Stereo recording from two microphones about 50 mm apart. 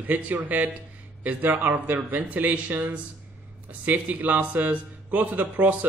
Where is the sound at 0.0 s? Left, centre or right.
Right.